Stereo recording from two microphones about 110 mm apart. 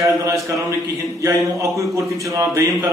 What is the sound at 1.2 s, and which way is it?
Speech, 30° right (ahead or behind).